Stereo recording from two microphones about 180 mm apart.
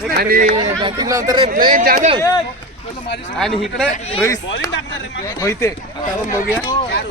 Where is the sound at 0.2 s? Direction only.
50° right (ahead or behind).